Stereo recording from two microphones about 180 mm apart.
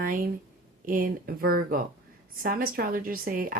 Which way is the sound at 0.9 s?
50° right (ahead or behind).